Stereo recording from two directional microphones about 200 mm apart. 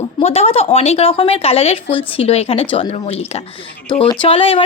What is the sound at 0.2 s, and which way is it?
Speech, 30° left (ahead or behind).